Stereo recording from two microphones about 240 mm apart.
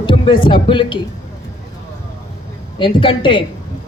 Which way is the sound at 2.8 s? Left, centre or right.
Centre.